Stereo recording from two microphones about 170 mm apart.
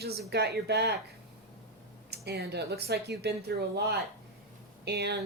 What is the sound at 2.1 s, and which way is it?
Speech, 75° right (ahead or behind).